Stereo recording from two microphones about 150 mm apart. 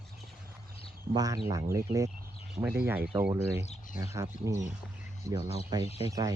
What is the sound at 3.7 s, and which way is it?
Speech, 60° left (ahead or behind).